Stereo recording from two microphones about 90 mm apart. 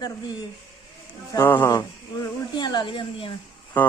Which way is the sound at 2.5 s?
55° left (ahead or behind).